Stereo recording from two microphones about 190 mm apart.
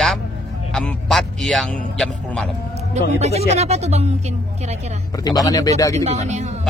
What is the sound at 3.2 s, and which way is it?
Speech, 35° right (ahead or behind).